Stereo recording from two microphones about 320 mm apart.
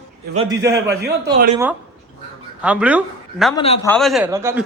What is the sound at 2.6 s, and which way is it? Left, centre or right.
Speech, centre.